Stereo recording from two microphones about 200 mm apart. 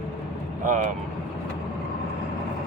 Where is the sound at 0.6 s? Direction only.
40° right (ahead or behind).